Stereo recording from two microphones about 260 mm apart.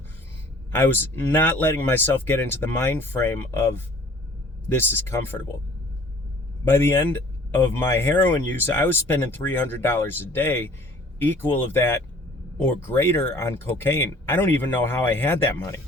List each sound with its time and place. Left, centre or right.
0.7 s speech: centre
6.7 s speech: centre